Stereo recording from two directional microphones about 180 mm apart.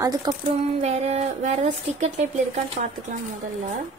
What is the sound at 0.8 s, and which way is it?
Speech, 35° right (ahead or behind).